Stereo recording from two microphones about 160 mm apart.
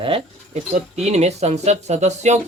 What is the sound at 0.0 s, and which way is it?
Speech, 40° right (ahead or behind).